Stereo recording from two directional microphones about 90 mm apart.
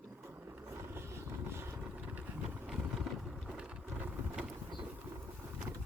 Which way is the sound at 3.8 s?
20° right (ahead or behind).